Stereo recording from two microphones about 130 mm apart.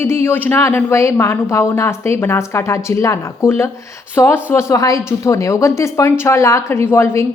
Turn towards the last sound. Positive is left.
turn(degrees=20)  # may be behind; listen again after turning